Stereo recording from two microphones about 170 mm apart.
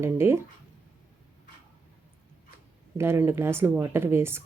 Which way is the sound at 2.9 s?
15° right (ahead or behind).